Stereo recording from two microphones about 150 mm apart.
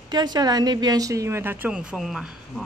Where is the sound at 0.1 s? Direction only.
30° right (ahead or behind).